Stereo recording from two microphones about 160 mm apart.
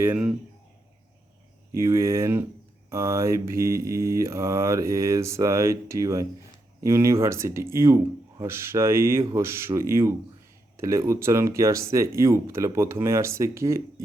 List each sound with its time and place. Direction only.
0.0 s mantra: 10° right (ahead or behind)
1.7 s mantra: 15° right (ahead or behind)